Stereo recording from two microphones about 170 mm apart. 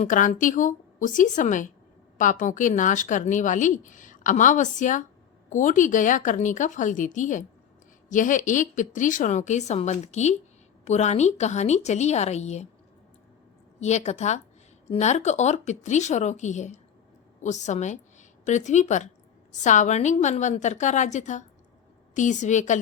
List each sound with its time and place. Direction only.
0.0 s a woman's voice: 50° left (ahead or behind)
13.7 s a woman's voice: 40° left (ahead or behind)